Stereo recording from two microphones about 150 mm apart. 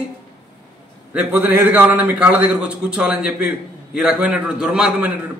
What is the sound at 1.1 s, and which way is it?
A man's voice, 10° right (ahead or behind).